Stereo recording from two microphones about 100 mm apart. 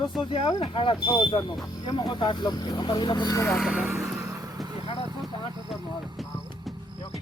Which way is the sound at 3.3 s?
25° left (ahead or behind).